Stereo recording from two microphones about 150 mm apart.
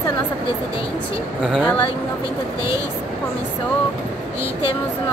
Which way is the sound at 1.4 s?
Centre (ahead or behind).